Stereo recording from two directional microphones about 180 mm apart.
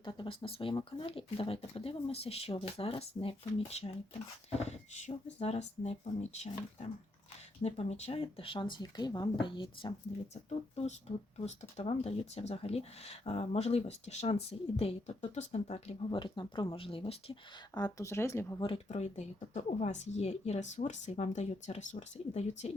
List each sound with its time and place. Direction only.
0.0 s speech: 30° left (ahead or behind)
11.1 s speech: 35° left (ahead or behind)
17.7 s speech: 20° left (ahead or behind)
18.6 s speech: 35° left (ahead or behind)